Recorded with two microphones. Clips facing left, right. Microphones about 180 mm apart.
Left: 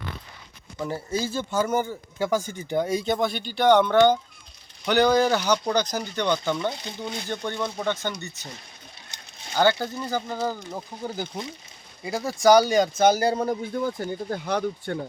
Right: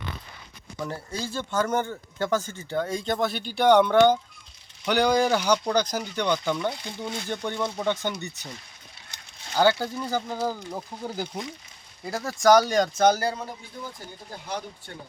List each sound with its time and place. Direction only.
1.1 s speech: 5° left (ahead or behind)
6.7 s speech: 20° left (ahead or behind)
7.3 s speech: 15° right (ahead or behind)
9.6 s speech: 10° right (ahead or behind)
12.0 s speech: 5° left (ahead or behind)
13.3 s speech: 45° left (ahead or behind)
13.7 s speech: 65° left (ahead or behind)